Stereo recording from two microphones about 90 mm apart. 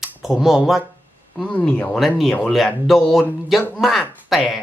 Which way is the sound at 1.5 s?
15° left (ahead or behind).